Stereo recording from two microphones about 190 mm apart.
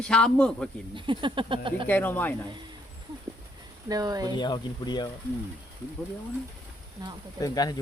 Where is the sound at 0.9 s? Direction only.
25° right (ahead or behind).